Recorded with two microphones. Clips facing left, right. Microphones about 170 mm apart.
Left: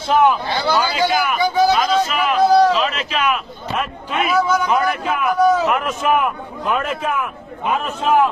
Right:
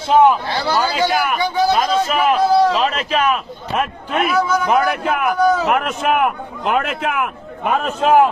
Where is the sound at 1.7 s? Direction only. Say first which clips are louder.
Right 1 dB; 45° right (ahead or behind).